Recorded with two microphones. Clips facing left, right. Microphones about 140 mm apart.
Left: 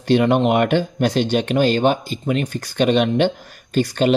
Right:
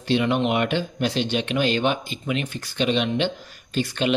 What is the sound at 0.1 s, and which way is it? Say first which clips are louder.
Speech: left 6 dB; 45° left (ahead or behind).